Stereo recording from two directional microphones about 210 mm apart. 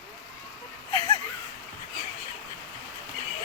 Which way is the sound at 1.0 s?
20° left (ahead or behind).